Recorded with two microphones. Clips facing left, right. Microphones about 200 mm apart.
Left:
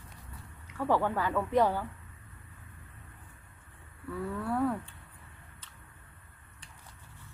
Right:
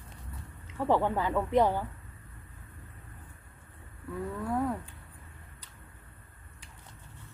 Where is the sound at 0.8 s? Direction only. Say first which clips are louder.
Right 2 dB; 20° right (ahead or behind).